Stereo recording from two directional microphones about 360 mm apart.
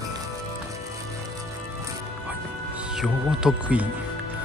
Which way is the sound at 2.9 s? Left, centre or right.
Centre.